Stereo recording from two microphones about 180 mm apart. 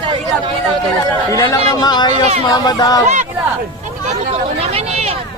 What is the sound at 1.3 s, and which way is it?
Speech, 20° left (ahead or behind).